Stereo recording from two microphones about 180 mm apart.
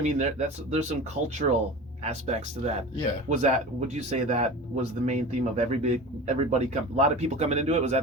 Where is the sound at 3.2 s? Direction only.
40° right (ahead or behind).